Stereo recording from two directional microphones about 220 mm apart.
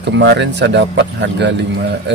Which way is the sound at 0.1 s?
55° right (ahead or behind).